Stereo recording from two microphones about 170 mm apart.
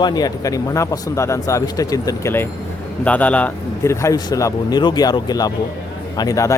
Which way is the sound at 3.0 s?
10° left (ahead or behind).